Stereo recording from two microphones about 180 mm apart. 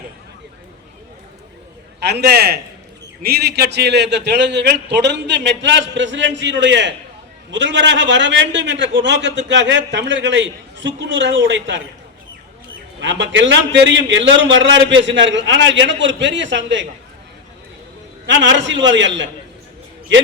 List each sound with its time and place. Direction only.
2.0 s a man's voice: 70° right (ahead or behind); by 11.8 s 85° right
13.0 s a man's voice: 80° right
18.3 s a man's voice: 90° right